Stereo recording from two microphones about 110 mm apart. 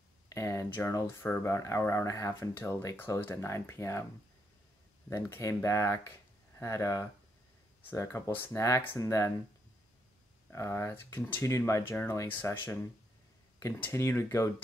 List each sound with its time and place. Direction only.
0.3 s a sound: 25° left (ahead or behind)
0.7 s speech: 25° left (ahead or behind)
5.1 s speech: 25° left (ahead or behind)
10.5 s speech: 25° left (ahead or behind)